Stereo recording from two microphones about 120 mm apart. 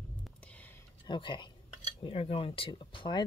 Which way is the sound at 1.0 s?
40° left (ahead or behind).